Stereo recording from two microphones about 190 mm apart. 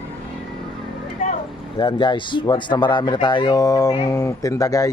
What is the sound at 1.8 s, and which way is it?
Speech, 25° left (ahead or behind).